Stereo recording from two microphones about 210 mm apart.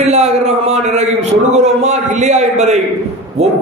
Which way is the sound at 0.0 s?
30° right (ahead or behind).